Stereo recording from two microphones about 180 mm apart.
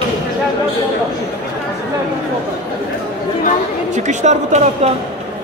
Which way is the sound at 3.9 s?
40° right (ahead or behind).